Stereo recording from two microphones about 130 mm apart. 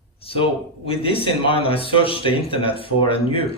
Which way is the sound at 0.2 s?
45° left (ahead or behind).